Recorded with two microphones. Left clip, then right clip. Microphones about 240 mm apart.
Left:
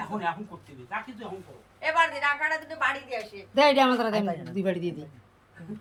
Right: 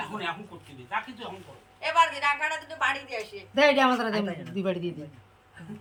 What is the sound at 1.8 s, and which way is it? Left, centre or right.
A woman's voice, right.